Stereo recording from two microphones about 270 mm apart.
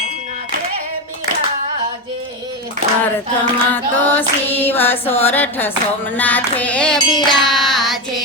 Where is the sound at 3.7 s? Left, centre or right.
Centre.